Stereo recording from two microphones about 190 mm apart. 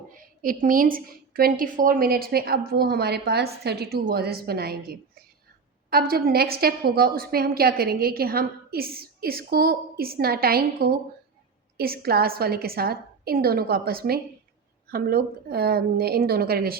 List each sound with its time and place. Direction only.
0.4 s a woman's voice: 45° right (ahead or behind)